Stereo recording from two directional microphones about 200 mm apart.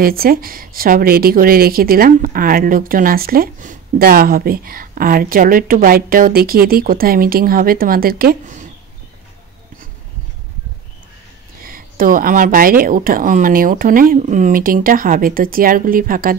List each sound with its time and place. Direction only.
0.0 s a woman's voice: 45° right (ahead or behind)
11.6 s a woman's voice: 45° right (ahead or behind)